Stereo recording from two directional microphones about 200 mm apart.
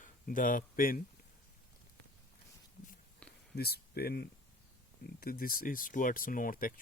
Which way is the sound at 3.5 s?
50° left (ahead or behind).